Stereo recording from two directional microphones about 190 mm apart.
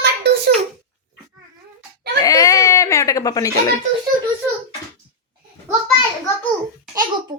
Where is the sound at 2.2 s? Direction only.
20° left (ahead or behind).